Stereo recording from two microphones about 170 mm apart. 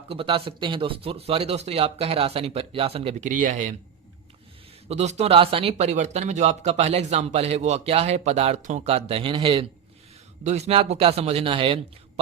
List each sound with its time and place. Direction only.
0.1 s speech: 30° right (ahead or behind); by 3.8 s 50° right (ahead or behind)
4.9 s speech: 40° right (ahead or behind)